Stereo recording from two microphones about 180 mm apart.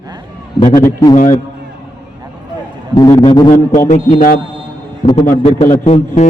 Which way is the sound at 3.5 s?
45° left (ahead or behind).